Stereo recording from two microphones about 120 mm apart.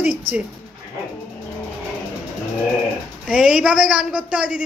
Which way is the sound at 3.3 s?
5° right (ahead or behind).